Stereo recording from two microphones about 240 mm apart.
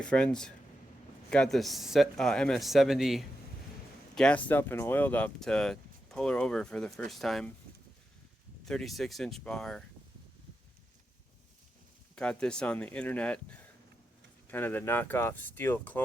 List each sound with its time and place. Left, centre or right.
0.0 s speech: centre
8.6 s speech: centre
12.1 s speech: centre